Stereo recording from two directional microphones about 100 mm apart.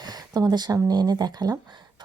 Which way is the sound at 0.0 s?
40° right (ahead or behind).